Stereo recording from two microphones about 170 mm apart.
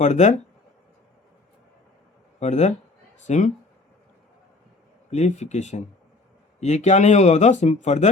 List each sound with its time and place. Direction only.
0.0 s speech: 45° left (ahead or behind)
2.4 s speech: 45° left (ahead or behind)
5.1 s speech: 45° left (ahead or behind)